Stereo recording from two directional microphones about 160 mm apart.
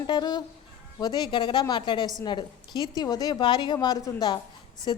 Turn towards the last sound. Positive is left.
turn(degrees=30)  # may be behind; listen again after turning